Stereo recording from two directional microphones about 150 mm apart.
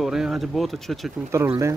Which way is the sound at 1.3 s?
20° right (ahead or behind).